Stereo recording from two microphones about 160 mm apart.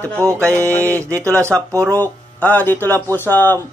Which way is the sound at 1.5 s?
10° left (ahead or behind).